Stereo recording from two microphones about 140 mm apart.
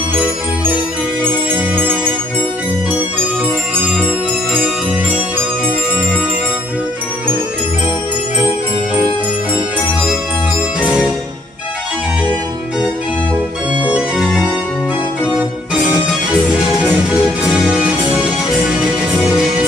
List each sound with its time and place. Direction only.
1.5 s music: 15° right (ahead or behind)
10.8 s music: 5° right (ahead or behind)
13.8 s organ: 10° right (ahead or behind)
15.3 s keyboard: centre (ahead or behind)
16.8 s music: 5° right (ahead or behind)